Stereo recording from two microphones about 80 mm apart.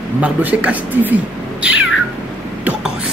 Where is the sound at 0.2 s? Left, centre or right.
Centre.